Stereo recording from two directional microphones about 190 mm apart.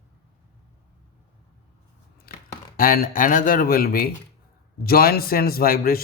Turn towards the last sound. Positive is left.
turn(degrees=50)  # may be behind; listen again after turning